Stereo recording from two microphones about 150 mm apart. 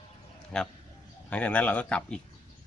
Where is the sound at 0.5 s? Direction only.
5° left (ahead or behind).